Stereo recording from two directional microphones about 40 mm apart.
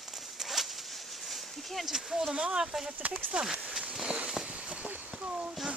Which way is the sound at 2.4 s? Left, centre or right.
Right.